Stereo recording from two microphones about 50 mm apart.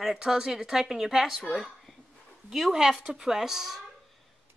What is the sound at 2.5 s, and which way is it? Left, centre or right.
Speech, centre.